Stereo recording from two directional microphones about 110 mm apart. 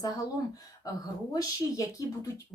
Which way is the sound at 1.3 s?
35° left (ahead or behind).